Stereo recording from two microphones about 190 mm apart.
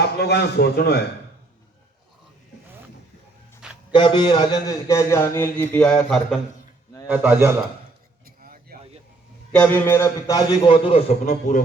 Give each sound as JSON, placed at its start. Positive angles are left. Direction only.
{"t": 0.2, "sound": "a man's voice", "side_deg": 60}
{"t": 3.9, "sound": "speech", "side_deg": 25}
{"t": 7.1, "sound": "a man's voice", "side_deg": -10}
{"t": 8.4, "sound": "a sound", "side_deg": -50}
{"t": 9.5, "sound": "a man's voice", "side_deg": 10}